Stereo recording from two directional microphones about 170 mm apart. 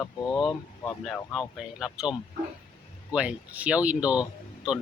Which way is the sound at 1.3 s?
Centre (ahead or behind).